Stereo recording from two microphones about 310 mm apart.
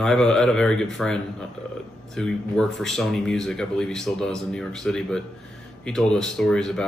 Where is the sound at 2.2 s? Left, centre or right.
Centre.